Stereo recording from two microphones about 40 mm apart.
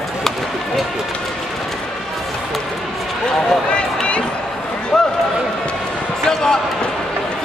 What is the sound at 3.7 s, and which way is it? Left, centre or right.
Run, left.